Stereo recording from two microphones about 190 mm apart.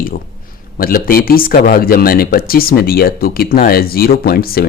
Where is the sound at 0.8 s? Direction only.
50° left (ahead or behind).